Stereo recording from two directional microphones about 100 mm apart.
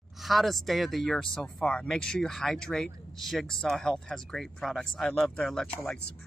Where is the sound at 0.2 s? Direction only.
Centre (ahead or behind).